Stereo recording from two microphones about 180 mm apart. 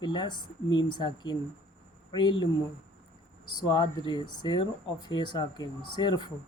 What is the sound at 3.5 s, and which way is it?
Speech, 25° left (ahead or behind).